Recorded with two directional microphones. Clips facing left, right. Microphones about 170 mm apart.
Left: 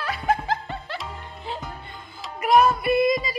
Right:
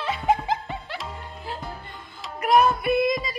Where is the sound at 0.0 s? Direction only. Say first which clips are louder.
Right 1 dB; 20° right (ahead or behind).